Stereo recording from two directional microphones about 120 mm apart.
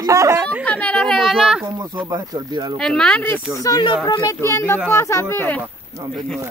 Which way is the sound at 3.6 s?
30° left (ahead or behind).